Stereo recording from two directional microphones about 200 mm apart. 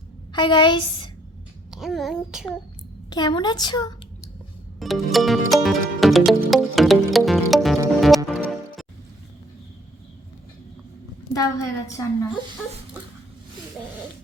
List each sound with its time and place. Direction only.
0.3 s a woman's voice: 25° left (ahead or behind)
1.7 s music: centre (ahead or behind)
3.1 s a woman's voice: 20° left (ahead or behind)
4.8 s music: centre (ahead or behind)
11.3 s a woman's voice: 15° left (ahead or behind)